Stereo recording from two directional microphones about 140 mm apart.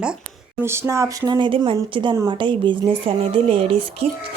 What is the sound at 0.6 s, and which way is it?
Speech, 20° right (ahead or behind).